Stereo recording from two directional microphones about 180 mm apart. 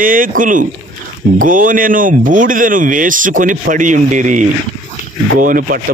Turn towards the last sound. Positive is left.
turn(degrees=-55)  # may be behind; listen again after turning